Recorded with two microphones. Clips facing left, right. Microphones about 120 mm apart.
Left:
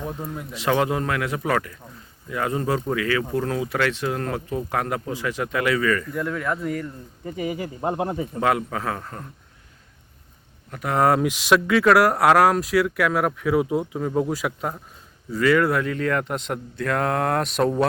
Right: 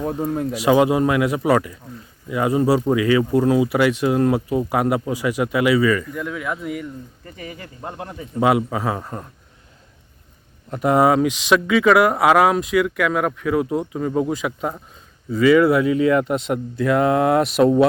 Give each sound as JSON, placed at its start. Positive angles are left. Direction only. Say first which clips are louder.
{"t": 0.1, "sound": "speech", "louder": "right 9 dB", "side_deg": -30}
{"t": 0.5, "sound": "speech", "louder": "right 5 dB", "side_deg": -10}
{"t": 7.3, "sound": "speech", "louder": "left 10 dB", "side_deg": 20}
{"t": 8.4, "sound": "speech", "louder": "right 6 dB", "side_deg": -10}
{"t": 10.7, "sound": "speech", "louder": "right 9 dB", "side_deg": -25}
{"t": 10.9, "sound": "speech", "louder": "right 3 dB", "side_deg": -5}